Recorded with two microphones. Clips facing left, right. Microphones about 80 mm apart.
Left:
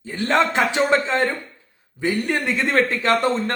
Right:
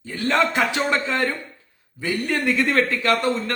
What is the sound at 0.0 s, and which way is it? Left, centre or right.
A man's voice, left.